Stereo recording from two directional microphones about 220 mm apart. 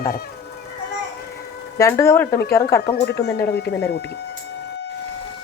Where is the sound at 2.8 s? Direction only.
45° left (ahead or behind).